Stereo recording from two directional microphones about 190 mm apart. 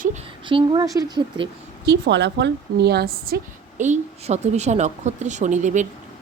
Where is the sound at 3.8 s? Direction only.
40° right (ahead or behind).